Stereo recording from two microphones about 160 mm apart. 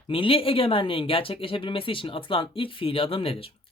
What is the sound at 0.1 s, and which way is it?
Speech, 35° left (ahead or behind).